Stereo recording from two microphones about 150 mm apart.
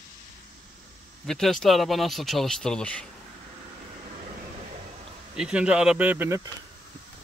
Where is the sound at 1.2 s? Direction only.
5° left (ahead or behind).